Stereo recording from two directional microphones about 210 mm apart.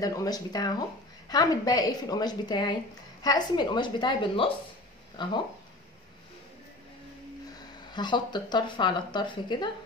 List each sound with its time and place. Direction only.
0.0 s speech: 15° left (ahead or behind)
7.9 s speech: 20° left (ahead or behind)